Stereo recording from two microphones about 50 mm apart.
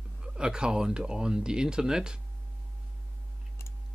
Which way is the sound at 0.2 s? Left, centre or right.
Centre.